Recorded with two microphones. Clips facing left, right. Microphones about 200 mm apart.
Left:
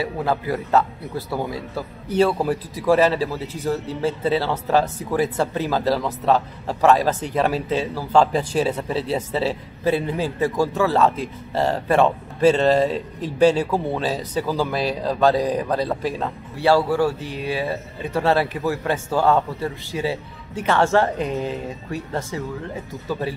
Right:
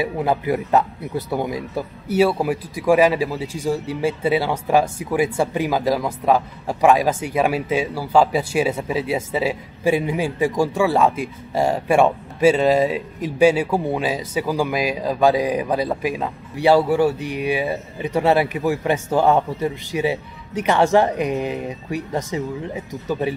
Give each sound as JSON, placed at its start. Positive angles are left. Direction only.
{"t": 0.0, "sound": "a man's voice", "side_deg": -15}